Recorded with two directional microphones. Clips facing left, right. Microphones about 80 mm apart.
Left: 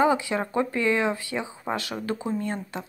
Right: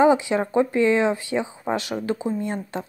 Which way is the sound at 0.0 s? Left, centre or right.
Right.